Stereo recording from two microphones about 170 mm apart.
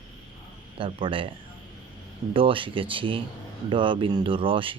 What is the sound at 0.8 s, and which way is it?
Speech, 30° right (ahead or behind).